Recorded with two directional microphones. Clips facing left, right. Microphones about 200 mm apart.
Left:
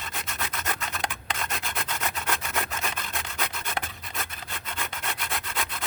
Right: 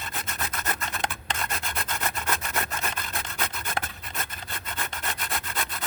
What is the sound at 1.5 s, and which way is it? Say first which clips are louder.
Rub: even; centre (ahead or behind).